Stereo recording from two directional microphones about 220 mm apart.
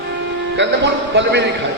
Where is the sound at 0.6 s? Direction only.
55° right (ahead or behind).